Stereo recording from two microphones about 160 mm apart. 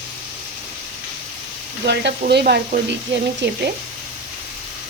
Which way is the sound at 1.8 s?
80° right.